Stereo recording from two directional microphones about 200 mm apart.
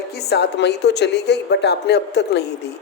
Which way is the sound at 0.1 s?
55° left (ahead or behind).